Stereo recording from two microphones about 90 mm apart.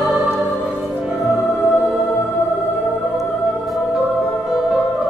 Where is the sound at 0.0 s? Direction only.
5° right (ahead or behind).